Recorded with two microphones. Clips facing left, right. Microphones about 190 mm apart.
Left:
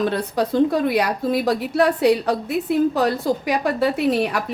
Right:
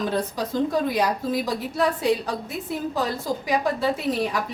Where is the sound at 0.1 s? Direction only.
65° left (ahead or behind).